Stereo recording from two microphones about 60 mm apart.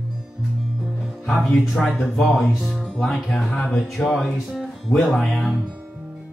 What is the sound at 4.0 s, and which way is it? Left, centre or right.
Speech, left.